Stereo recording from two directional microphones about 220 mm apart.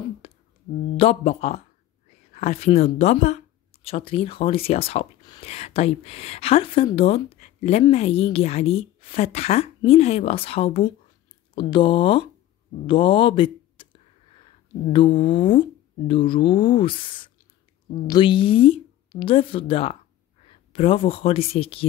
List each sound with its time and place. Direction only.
0.2 s a sound: 25° left (ahead or behind)
0.9 s speech: 30° left (ahead or behind)
14.9 s speech: 20° left (ahead or behind)